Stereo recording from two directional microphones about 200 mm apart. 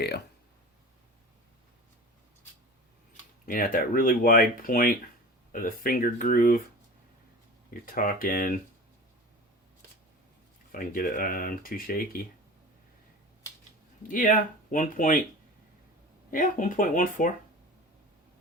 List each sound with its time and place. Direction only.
3.4 s speech: 45° left (ahead or behind)
7.7 s speech: 45° left (ahead or behind)
10.7 s speech: 45° left (ahead or behind)
14.1 s speech: 40° left (ahead or behind)
16.3 s speech: 40° left (ahead or behind)